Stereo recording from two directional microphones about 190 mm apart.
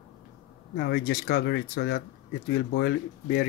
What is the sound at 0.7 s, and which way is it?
Speech, 60° left (ahead or behind).